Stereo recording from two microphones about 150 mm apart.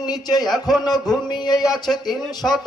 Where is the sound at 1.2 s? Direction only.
30° left (ahead or behind).